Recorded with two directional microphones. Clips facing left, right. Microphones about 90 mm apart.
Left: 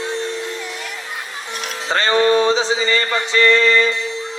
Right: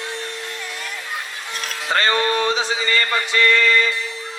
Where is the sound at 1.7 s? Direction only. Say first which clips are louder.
Left 3 dB; 30° left (ahead or behind).